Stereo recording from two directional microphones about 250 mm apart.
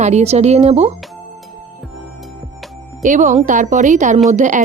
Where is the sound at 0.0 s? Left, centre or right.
Right.